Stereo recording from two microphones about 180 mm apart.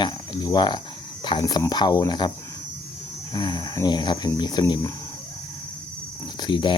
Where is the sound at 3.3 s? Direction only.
25° left (ahead or behind).